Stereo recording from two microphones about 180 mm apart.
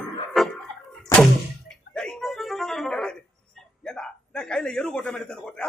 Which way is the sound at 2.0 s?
5° left (ahead or behind).